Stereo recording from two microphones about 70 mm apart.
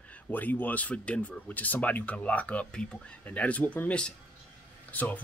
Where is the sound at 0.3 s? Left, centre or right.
Left.